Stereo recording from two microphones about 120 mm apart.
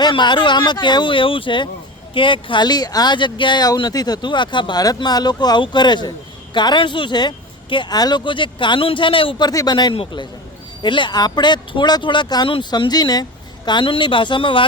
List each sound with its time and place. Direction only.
0.0 s speech: 40° left (ahead or behind)
9.5 s speech: 30° left (ahead or behind)
9.9 s speech: 45° left (ahead or behind)